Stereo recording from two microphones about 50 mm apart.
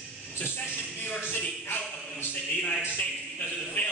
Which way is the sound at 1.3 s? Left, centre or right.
Left.